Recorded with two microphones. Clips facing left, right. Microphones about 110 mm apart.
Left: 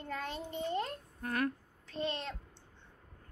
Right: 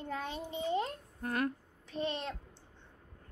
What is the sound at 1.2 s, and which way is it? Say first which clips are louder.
A child's voice: right 1 dB; 25° right (ahead or behind).